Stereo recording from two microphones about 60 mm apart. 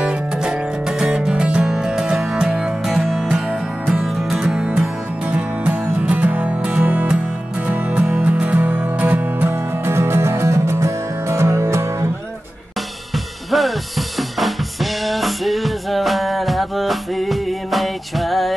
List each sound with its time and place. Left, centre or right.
0.0 s music: centre
4.0 s music: centre
4.4 s music: centre; by 9.9 s right
9.9 s music: right
13.1 s drum kit: centre